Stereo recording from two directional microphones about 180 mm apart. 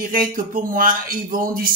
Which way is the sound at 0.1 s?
50° right (ahead or behind).